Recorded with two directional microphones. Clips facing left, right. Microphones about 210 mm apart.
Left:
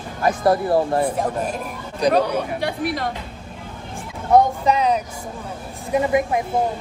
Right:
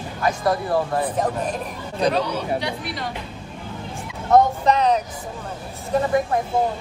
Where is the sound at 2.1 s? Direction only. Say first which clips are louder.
Left 3 dB; 50° left (ahead or behind).